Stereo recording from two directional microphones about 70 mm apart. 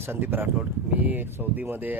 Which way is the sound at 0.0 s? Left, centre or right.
Right.